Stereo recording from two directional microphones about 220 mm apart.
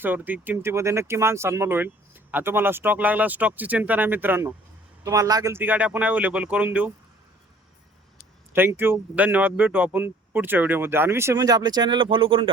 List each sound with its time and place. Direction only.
0.0 s speech: 10° right (ahead or behind)
8.5 s speech: 10° right (ahead or behind)